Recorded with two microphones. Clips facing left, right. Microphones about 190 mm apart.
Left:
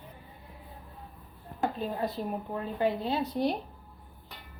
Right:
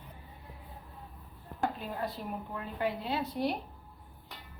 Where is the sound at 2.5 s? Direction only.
30° left (ahead or behind).